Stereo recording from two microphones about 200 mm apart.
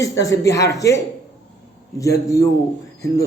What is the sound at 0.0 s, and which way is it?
A man's voice, 15° left (ahead or behind).